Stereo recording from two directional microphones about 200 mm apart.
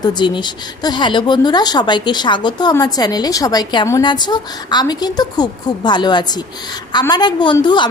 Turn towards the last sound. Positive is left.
turn(degrees=25)  # may be behind; listen again after turning